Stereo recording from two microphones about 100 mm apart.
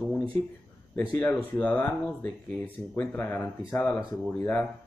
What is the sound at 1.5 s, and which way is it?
Speech, 15° left (ahead or behind).